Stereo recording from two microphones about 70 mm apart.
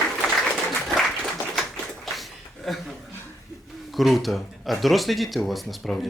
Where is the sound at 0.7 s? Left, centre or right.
Centre.